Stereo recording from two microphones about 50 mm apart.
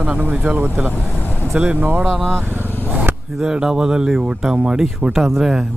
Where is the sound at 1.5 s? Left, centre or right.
Right.